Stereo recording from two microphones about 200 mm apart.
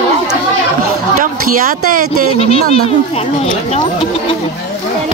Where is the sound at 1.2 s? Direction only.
45° right (ahead or behind).